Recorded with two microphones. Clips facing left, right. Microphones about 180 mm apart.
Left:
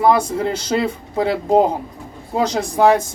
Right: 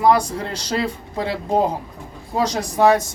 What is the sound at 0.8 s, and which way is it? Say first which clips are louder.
Speech: left 4 dB; 25° left (ahead or behind).